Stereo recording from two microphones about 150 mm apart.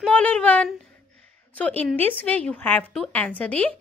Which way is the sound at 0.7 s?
5° left (ahead or behind).